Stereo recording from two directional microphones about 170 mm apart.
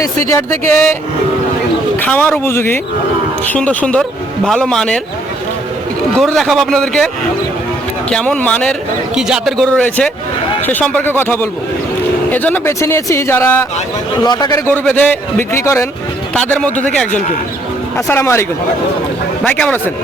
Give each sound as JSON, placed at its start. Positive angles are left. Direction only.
{"t": 0.0, "sound": "speech", "side_deg": 20}
{"t": 2.0, "sound": "a man's voice", "side_deg": 10}
{"t": 6.1, "sound": "a man's voice", "side_deg": 5}
{"t": 8.1, "sound": "a man's voice", "side_deg": 5}
{"t": 9.1, "sound": "a man's voice", "side_deg": -5}
{"t": 14.3, "sound": "a man's voice", "side_deg": 25}
{"t": 14.7, "sound": "speech", "side_deg": 10}
{"t": 17.9, "sound": "speech", "side_deg": 15}
{"t": 19.5, "sound": "speech", "side_deg": 10}